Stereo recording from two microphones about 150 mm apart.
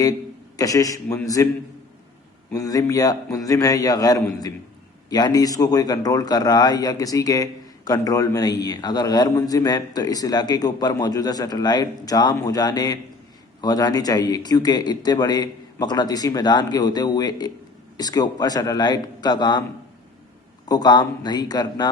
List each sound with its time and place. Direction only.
0.0 s a man's voice: 25° left (ahead or behind)
2.5 s a man's voice: 25° left (ahead or behind)
20.7 s a man's voice: 25° left (ahead or behind)